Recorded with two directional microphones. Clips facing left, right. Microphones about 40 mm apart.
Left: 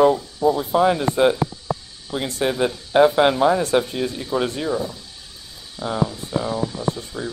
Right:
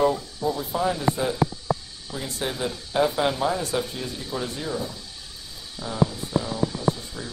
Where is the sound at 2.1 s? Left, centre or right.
Left.